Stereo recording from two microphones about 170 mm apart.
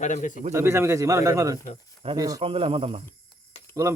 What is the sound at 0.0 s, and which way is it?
Speech, 45° left (ahead or behind).